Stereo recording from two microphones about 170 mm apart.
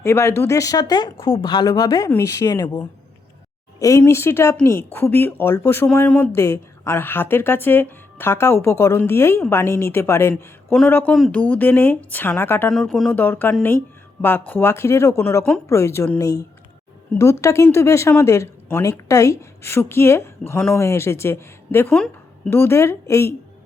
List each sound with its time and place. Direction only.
0.0 s a woman's voice: 15° left (ahead or behind)
12.7 s a woman's voice: centre (ahead or behind)